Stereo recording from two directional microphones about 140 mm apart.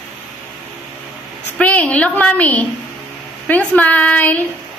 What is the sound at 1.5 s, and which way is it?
A woman's voice, 10° left (ahead or behind).